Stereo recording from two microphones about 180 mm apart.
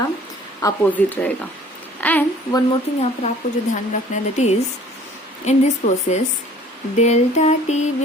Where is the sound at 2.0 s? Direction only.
10° left (ahead or behind).